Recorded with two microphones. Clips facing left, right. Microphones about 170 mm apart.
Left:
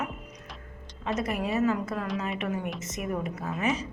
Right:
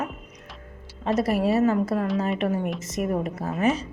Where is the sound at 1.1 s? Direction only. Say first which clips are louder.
Right 7 dB; 35° right (ahead or behind).